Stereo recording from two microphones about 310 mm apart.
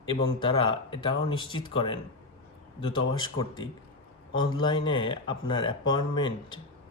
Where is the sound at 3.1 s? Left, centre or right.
Centre.